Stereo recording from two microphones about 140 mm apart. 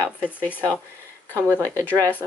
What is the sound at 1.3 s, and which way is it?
Speech, 15° left (ahead or behind).